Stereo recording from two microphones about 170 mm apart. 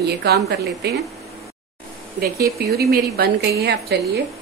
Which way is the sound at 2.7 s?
70° right (ahead or behind).